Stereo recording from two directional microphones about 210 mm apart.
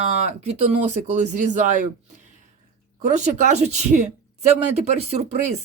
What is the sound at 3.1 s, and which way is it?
Speech, 35° right (ahead or behind).